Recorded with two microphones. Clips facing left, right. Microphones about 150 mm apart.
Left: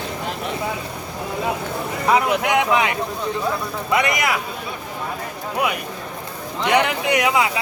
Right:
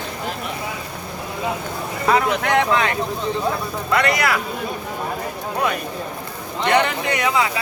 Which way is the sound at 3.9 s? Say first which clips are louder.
Right 1 dB; 20° left (ahead or behind).